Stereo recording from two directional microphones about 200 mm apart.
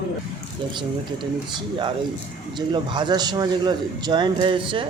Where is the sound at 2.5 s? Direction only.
25° right (ahead or behind).